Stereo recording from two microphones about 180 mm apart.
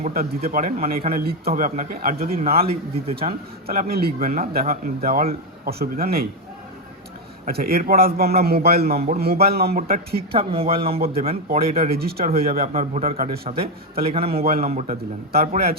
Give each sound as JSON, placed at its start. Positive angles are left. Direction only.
{"t": 0.0, "sound": "speech", "side_deg": -50}
{"t": 2.6, "sound": "speech", "side_deg": -30}
{"t": 3.2, "sound": "a man's voice", "side_deg": -55}
{"t": 7.4, "sound": "a man's voice", "side_deg": -55}
{"t": 10.3, "sound": "speech", "side_deg": -30}
{"t": 10.9, "sound": "a man's voice", "side_deg": -55}
{"t": 11.5, "sound": "speech", "side_deg": -35}
{"t": 11.8, "sound": "a man's voice", "side_deg": -55}
{"t": 12.7, "sound": "speech", "side_deg": -40}
{"t": 14.0, "sound": "speech", "side_deg": -30}
{"t": 15.3, "sound": "a man's voice", "side_deg": -60}